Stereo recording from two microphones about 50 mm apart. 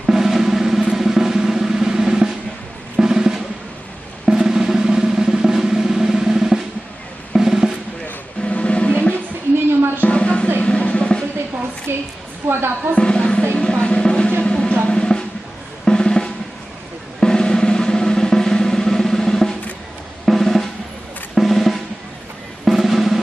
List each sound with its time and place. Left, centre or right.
0.0 s drum: centre
4.3 s drum roll: centre
7.3 s drum: centre
8.4 s drum: left
9.6 s music: right
10.1 s music: left
10.6 s drum roll: left
11.9 s a sound: right
13.0 s music: centre
13.7 s drum roll: centre
14.5 s drum: centre